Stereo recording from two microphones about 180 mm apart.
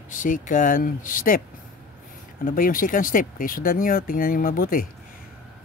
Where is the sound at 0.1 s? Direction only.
45° left (ahead or behind).